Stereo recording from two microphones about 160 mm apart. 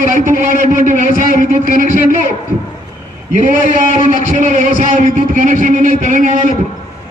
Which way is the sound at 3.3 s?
55° right (ahead or behind).